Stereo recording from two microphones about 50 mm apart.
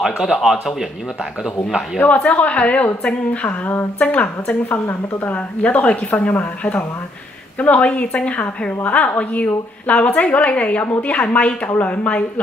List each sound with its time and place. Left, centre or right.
0.0 s a man's voice: centre
2.0 s a woman's voice: left
4.1 s a woman's voice: left